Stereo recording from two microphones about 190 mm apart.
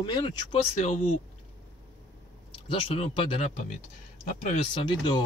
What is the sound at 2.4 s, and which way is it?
Speech, 25° left (ahead or behind).